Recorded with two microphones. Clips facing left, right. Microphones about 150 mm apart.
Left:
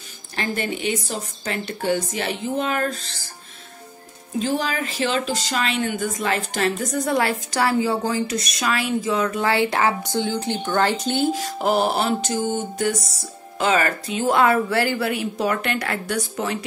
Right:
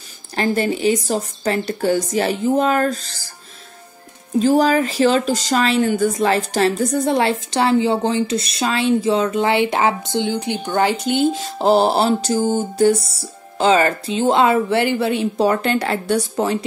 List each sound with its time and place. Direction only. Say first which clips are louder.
0.4 s a woman's voice: right 7 dB; 35° right (ahead or behind)
4.4 s a woman's voice: right 9 dB; 40° right (ahead or behind)